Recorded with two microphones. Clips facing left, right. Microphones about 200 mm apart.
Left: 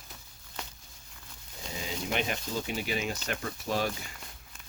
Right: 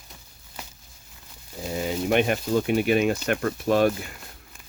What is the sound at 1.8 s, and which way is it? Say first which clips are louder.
Speech: right 10 dB; 60° right (ahead or behind).